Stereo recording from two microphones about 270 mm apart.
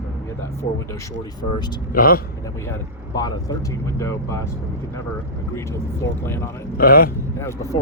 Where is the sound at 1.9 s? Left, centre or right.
Left.